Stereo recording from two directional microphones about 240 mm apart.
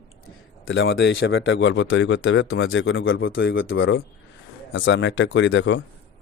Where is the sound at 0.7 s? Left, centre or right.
Left.